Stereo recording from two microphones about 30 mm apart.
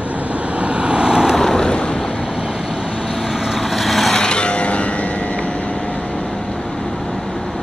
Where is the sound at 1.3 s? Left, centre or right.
Centre.